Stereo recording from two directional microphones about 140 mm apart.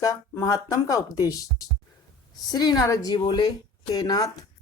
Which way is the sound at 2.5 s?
30° left (ahead or behind).